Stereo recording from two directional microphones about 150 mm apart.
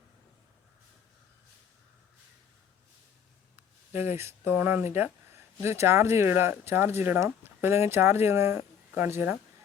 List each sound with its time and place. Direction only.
4.2 s speech: 15° right (ahead or behind)
4.9 s a sound: 15° right (ahead or behind)
5.8 s speech: 15° right (ahead or behind)